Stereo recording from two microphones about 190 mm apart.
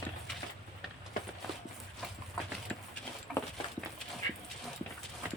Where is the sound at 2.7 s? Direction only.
5° left (ahead or behind).